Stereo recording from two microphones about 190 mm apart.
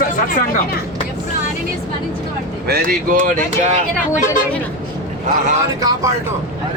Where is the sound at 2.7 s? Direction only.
45° right (ahead or behind).